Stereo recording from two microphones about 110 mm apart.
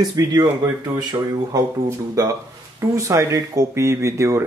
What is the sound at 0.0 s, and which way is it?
Speech, 35° right (ahead or behind).